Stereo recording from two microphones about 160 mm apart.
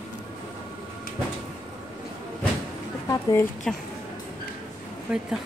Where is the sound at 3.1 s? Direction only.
20° left (ahead or behind).